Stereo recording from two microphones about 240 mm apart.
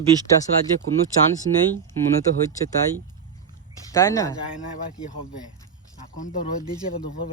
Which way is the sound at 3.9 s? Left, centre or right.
Centre.